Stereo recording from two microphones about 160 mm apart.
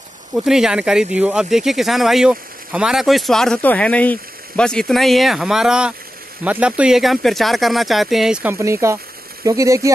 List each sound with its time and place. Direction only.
0.4 s speech: 5° right (ahead or behind)
8.5 s speech: 15° right (ahead or behind)